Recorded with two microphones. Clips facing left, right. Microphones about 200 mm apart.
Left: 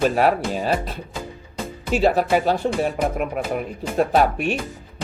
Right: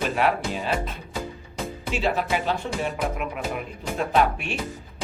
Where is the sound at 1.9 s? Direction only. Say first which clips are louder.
Left 7 dB; 40° left (ahead or behind).